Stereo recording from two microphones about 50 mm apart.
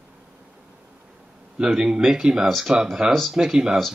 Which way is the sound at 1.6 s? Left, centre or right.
Centre.